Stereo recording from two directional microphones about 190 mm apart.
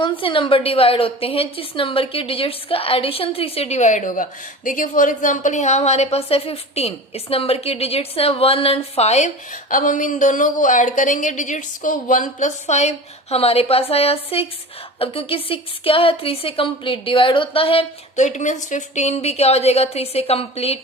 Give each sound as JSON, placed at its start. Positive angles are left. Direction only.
{"t": 0.0, "sound": "a woman's voice", "side_deg": 25}